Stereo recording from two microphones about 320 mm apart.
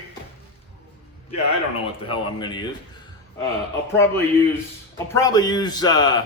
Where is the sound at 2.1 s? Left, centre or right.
Centre.